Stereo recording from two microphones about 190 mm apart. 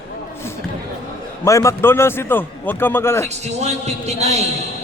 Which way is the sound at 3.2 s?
35° right (ahead or behind).